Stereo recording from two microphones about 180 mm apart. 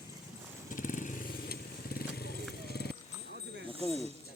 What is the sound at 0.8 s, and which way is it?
Motorcycle, 45° left (ahead or behind).